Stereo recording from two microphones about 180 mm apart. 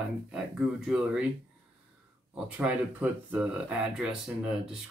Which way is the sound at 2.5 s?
10° right (ahead or behind).